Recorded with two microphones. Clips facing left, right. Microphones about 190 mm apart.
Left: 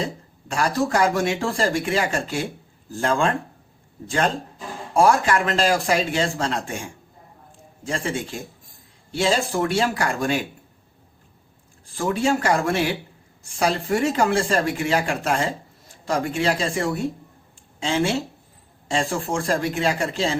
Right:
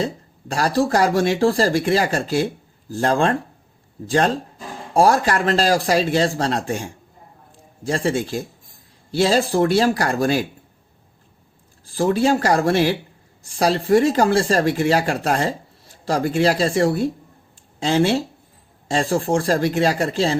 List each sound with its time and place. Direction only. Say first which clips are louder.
0.4 s speech: right 3 dB; 35° right (ahead or behind)
4.9 s speech: right 2 dB; 35° right (ahead or behind)
11.9 s speech: right 4 dB; 35° right (ahead or behind)